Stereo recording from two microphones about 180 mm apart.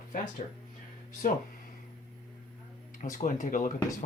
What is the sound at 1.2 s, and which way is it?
Speech, 50° left (ahead or behind).